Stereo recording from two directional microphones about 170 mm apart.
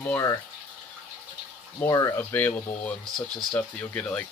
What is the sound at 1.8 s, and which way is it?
Speech, 20° left (ahead or behind).